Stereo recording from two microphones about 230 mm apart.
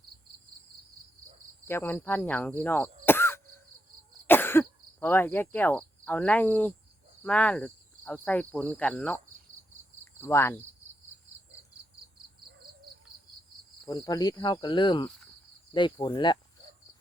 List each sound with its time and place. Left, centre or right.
1.6 s speech: centre
10.0 s cricket: centre
13.8 s cricket: centre
15.7 s speech: left